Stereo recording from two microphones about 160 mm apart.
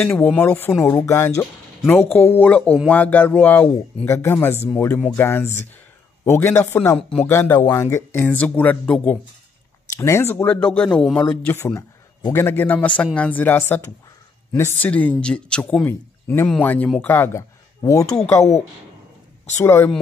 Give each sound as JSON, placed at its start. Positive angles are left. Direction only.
{"t": 0.0, "sound": "speech", "side_deg": 10}
{"t": 7.2, "sound": "speech", "side_deg": 15}
{"t": 19.5, "sound": "speech", "side_deg": 15}